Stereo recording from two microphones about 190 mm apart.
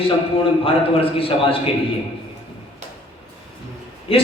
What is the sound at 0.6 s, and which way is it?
Speech, 30° left (ahead or behind).